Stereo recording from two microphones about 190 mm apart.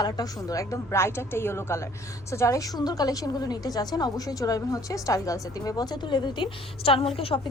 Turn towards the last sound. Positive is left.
turn(degrees=30)  # may be behind; listen again after turning